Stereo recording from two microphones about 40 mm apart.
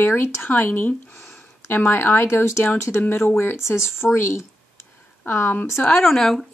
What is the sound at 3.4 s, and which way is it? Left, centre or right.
Speech, left.